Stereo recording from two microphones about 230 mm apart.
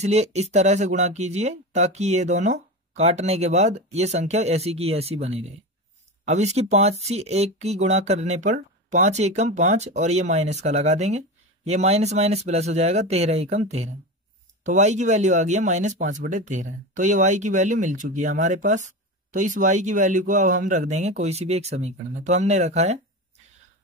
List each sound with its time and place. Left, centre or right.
0.0 s speech: right